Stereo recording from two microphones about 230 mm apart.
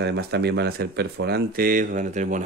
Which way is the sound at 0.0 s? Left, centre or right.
Right.